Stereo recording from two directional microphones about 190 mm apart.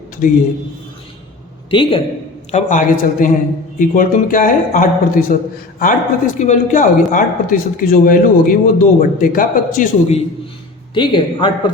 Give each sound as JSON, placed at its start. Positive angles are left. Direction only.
{"t": 0.2, "sound": "speech", "side_deg": 45}
{"t": 1.7, "sound": "speech", "side_deg": 25}
{"t": 2.5, "sound": "speech", "side_deg": 40}
{"t": 10.9, "sound": "speech", "side_deg": 25}